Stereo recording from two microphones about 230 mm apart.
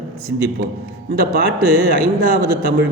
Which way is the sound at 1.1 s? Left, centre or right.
Right.